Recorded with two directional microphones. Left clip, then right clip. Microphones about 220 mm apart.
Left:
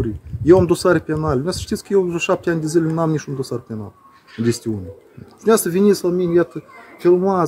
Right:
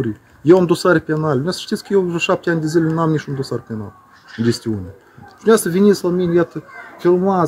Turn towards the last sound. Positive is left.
turn(degrees=15)  # may be behind; listen again after turning